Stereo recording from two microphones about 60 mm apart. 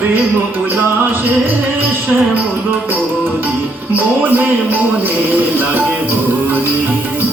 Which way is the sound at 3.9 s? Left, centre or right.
Right.